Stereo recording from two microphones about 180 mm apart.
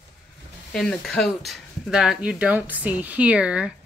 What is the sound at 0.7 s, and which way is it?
Speech, 5° left (ahead or behind).